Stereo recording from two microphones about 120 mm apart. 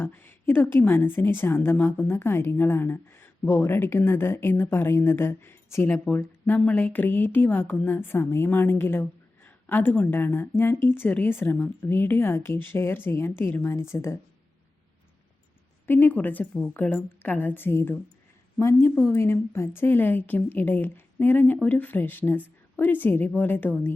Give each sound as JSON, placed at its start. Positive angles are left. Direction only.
{"t": 0.0, "sound": "speech", "side_deg": 15}
{"t": 15.9, "sound": "a woman's voice", "side_deg": 15}